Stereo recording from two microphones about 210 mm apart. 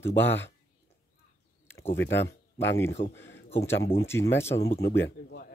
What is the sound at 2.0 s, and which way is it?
Speech, 55° left (ahead or behind).